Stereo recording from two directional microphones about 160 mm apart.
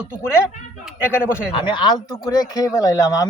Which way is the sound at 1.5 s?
30° left (ahead or behind).